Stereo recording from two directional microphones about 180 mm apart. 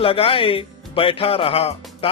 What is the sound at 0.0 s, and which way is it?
A man's voice, 30° left (ahead or behind).